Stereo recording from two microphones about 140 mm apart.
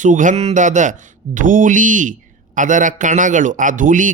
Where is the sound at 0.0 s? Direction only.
65° right (ahead or behind).